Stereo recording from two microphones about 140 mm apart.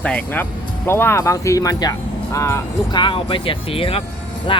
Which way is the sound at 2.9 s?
35° left (ahead or behind).